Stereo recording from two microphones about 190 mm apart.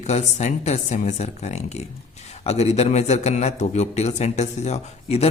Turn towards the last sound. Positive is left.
turn(degrees=35)  # may be behind; listen again after turning